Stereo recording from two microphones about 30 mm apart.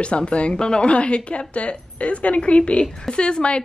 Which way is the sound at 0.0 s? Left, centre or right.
Left.